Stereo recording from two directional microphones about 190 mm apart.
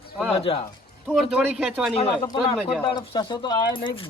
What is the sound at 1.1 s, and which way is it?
Speech, 5° right (ahead or behind).